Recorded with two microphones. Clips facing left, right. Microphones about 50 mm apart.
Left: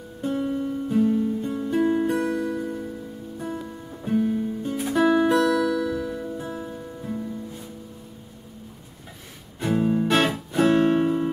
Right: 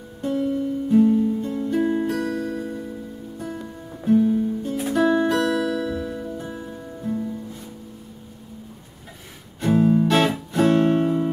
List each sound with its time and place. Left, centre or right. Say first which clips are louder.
0.2 s music: right 2 dB; centre
2.6 s music: even; centre
4.0 s music: right 5 dB; centre
9.6 s music: right 4 dB; centre